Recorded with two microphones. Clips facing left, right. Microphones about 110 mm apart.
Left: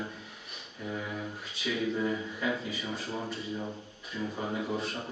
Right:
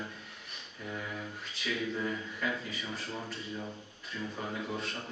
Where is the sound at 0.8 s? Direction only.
15° left (ahead or behind).